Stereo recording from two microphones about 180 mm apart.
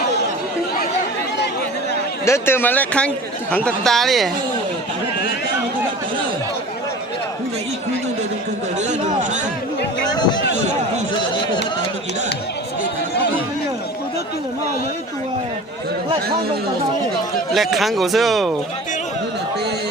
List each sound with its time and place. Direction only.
2.2 s speech: 15° left (ahead or behind)
10.2 s a sound: 25° left (ahead or behind)
17.5 s speech: centre (ahead or behind)